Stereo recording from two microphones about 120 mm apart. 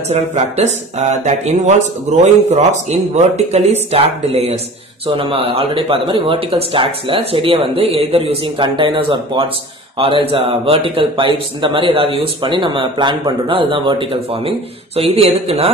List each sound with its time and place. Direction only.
0.1 s a man's voice: 65° right (ahead or behind)